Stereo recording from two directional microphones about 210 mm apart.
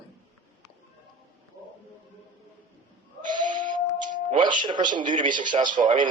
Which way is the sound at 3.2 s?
40° right (ahead or behind).